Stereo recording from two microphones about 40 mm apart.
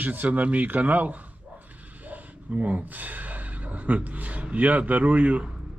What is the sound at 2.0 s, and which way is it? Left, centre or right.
Gasp, right.